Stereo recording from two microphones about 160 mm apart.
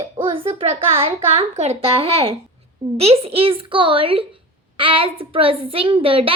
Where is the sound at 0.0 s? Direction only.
30° right (ahead or behind).